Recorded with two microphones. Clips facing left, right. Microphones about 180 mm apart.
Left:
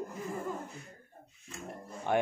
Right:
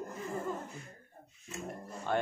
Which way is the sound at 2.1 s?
15° left (ahead or behind).